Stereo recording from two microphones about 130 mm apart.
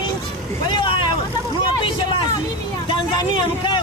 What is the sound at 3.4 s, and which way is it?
Speech, 40° left (ahead or behind).